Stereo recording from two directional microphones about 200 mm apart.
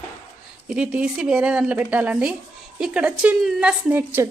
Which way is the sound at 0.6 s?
5° right (ahead or behind).